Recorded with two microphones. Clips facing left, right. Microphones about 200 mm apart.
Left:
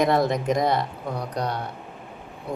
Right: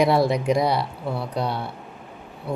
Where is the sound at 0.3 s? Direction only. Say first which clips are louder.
Right 1 dB; 45° left (ahead or behind).